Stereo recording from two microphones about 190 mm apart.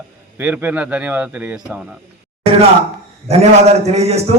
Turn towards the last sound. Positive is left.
turn(degrees=-35)  # may be behind; listen again after turning